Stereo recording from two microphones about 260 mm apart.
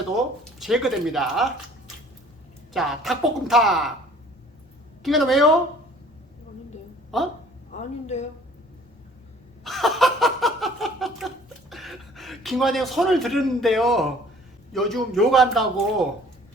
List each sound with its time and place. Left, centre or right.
0.6 s a man's voice: centre
2.7 s a man's voice: centre
5.0 s a man's voice: centre
7.1 s a man's voice: centre
7.8 s speech: left
9.6 s a sound: centre
11.7 s a man's voice: centre